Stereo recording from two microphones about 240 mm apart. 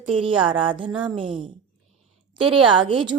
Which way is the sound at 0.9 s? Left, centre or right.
Centre.